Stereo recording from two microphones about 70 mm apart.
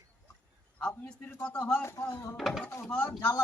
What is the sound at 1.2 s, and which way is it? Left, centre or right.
Speech, left.